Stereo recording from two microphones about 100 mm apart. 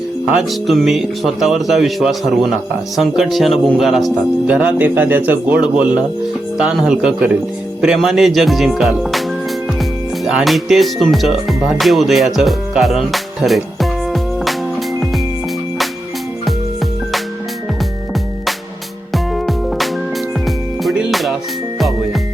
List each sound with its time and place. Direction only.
0.3 s a man's voice: centre (ahead or behind)
4.5 s a man's voice: 20° right (ahead or behind); by 9.2 s centre (ahead or behind)
10.2 s music: centre (ahead or behind)
19.1 s music: centre (ahead or behind)